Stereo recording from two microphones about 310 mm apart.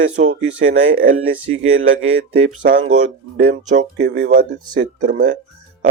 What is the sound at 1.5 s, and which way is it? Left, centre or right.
Speech, right.